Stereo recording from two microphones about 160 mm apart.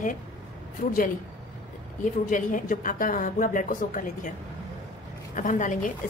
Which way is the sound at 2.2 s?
55° left (ahead or behind).